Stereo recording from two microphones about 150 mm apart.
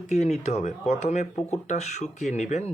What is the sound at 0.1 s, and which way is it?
Speech, 50° left (ahead or behind).